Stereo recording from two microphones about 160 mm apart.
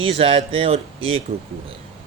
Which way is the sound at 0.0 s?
35° right (ahead or behind).